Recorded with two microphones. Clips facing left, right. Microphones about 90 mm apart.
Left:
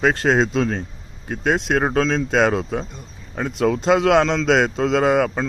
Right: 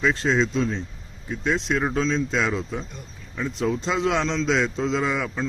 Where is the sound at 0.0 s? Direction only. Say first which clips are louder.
Left 4 dB; 60° left (ahead or behind).